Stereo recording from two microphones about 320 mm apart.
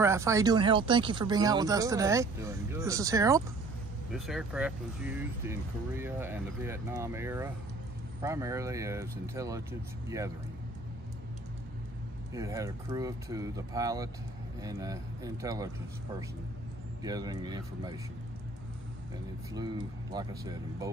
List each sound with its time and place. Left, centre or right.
0.0 s speech: centre
12.4 s speech: centre
17.0 s speech: centre
19.5 s speech: centre